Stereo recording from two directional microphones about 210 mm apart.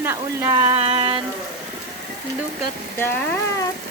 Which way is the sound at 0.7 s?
25° right (ahead or behind).